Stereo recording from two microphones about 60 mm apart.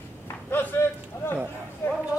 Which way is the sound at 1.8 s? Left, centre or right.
Left.